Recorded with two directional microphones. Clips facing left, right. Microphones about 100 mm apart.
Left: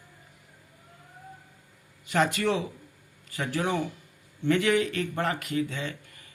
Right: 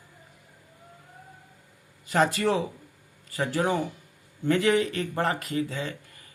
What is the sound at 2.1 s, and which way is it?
Speech, 35° right (ahead or behind).